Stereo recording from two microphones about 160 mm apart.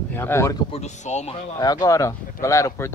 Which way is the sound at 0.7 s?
45° left (ahead or behind).